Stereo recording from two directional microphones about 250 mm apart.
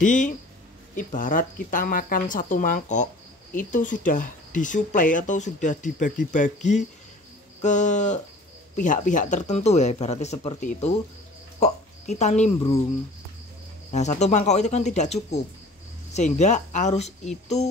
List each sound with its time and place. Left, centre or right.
0.0 s speech: left
13.9 s speech: left